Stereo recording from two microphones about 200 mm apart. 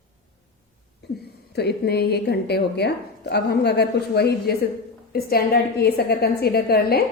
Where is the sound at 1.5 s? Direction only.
55° left (ahead or behind).